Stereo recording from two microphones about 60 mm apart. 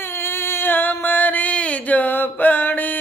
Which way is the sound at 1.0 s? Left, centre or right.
Left.